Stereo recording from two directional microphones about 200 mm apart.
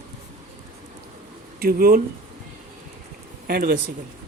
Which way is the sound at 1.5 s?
50° right (ahead or behind).